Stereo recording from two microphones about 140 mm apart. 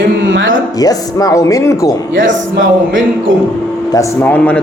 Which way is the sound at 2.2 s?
80° right.